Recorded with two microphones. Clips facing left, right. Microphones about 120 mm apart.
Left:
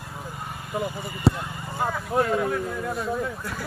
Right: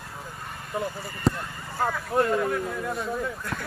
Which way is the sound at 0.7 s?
5° left (ahead or behind).